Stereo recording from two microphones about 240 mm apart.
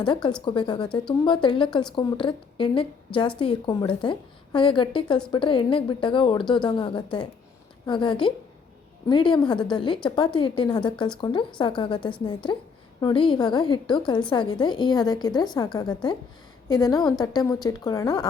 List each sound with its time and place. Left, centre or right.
0.0 s a woman's voice: centre